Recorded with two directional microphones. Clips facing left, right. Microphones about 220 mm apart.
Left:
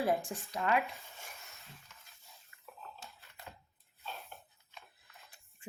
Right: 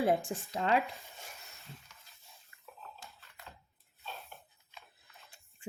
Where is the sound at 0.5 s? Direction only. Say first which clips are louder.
Right 2 dB; 30° right (ahead or behind).